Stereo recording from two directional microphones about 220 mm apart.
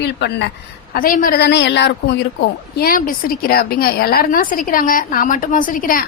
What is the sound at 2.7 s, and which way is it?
A woman's voice, 40° left (ahead or behind).